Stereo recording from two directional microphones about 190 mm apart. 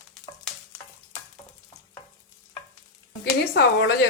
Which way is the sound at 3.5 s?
65° left (ahead or behind).